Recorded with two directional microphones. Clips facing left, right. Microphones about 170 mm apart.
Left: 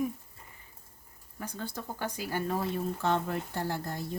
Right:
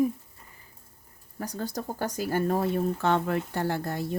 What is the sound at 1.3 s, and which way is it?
Speech, 40° right (ahead or behind).